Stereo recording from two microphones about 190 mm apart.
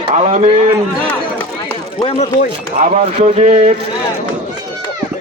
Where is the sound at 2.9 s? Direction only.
35° right (ahead or behind).